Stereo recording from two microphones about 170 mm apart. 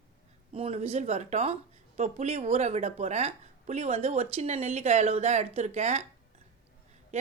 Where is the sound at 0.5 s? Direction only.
35° right (ahead or behind).